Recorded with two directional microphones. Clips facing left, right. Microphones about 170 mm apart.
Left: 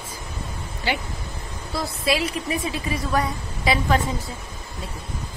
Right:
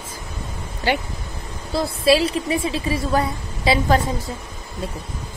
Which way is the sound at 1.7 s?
30° right (ahead or behind).